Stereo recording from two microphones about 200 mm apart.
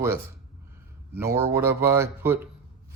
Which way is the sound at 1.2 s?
15° right (ahead or behind).